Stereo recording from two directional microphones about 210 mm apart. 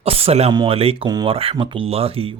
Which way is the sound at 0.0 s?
30° right (ahead or behind).